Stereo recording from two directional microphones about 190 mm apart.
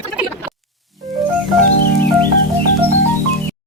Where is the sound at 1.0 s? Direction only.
Centre (ahead or behind).